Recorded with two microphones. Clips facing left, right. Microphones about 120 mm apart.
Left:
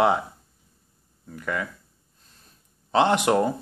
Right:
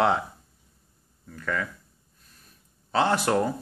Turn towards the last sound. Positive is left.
turn(degrees=20)  # may be behind; listen again after turning